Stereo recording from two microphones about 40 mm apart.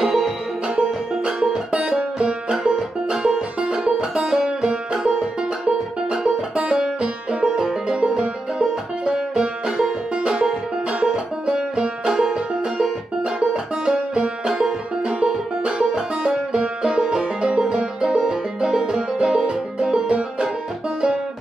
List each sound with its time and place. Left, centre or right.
0.0 s banjo: centre
1.1 s music: centre
7.5 s music: centre
13.2 s music: right